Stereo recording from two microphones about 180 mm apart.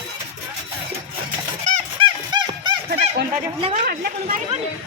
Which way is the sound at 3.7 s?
50° right (ahead or behind).